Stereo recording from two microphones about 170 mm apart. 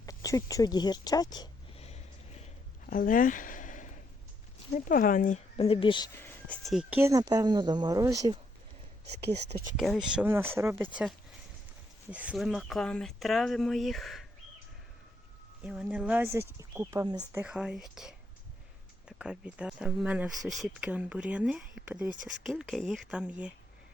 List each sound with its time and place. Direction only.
0.0 s speech: 20° left (ahead or behind)
2.8 s a sound: 55° left (ahead or behind)
4.7 s speech: 55° left (ahead or behind)
5.5 s speech: 30° left (ahead or behind)
6.1 s speech: 10° left (ahead or behind)
7.0 s speech: 20° right (ahead or behind)
9.7 s speech: centre (ahead or behind)
12.1 s speech: 5° right (ahead or behind)
15.6 s speech: 5° right (ahead or behind)
17.3 s speech: 5° right (ahead or behind)